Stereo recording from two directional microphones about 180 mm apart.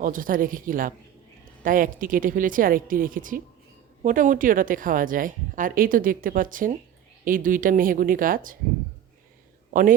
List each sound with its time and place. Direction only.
0.0 s a woman's voice: 50° right (ahead or behind)